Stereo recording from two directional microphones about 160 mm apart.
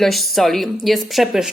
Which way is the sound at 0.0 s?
Centre (ahead or behind).